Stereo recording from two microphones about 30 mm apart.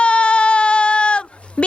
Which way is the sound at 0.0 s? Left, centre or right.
Left.